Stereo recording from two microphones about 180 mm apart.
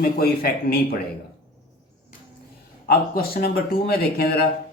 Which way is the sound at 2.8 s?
60° left (ahead or behind).